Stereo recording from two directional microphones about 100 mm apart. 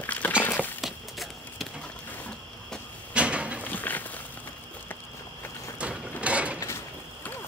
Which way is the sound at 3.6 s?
15° left (ahead or behind).